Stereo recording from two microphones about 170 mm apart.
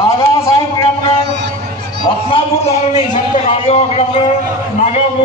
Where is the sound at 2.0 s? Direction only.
30° left (ahead or behind).